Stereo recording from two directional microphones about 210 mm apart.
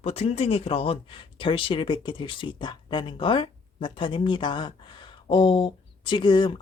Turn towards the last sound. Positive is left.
turn(degrees=20)  # may be behind; listen again after turning